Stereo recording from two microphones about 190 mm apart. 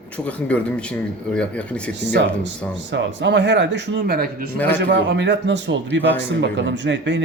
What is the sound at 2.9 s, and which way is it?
A man's voice, 65° right (ahead or behind).